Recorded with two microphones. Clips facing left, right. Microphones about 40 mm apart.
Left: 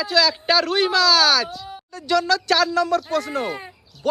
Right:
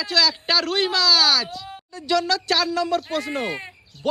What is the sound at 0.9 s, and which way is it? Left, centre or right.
Speech, left.